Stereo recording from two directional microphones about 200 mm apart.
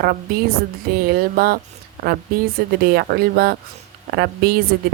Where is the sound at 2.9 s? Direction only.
50° right (ahead or behind).